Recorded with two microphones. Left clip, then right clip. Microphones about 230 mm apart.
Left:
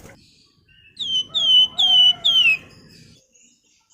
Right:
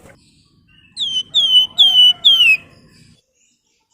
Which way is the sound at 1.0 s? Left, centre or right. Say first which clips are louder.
Right 5 dB; right.